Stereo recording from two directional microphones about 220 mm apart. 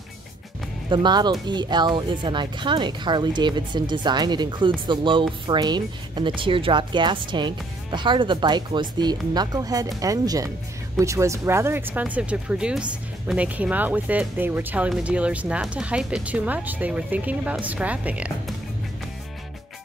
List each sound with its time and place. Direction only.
0.8 s speech: 20° right (ahead or behind)